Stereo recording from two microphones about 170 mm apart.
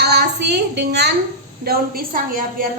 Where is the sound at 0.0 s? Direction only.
75° right (ahead or behind).